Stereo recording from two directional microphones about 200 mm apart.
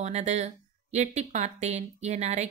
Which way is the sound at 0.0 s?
35° right (ahead or behind).